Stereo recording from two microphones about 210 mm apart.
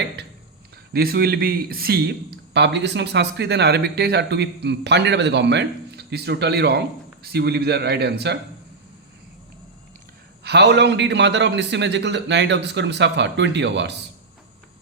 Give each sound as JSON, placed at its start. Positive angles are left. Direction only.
{"t": 0.9, "sound": "a man's voice", "side_deg": -45}
{"t": 10.4, "sound": "a man's voice", "side_deg": -55}